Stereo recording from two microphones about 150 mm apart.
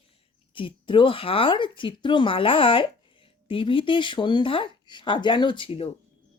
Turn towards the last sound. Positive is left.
turn(degrees=40)  # may be behind; listen again after turning